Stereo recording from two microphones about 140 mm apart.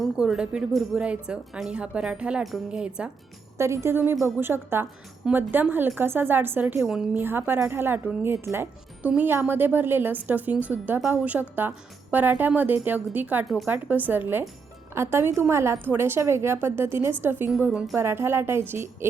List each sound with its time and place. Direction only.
0.0 s speech: 5° right (ahead or behind)
3.6 s a woman's voice: 20° right (ahead or behind)
6.8 s a woman's voice: 5° right (ahead or behind)
17.7 s speech: centre (ahead or behind)
17.9 s a woman's voice: 20° right (ahead or behind)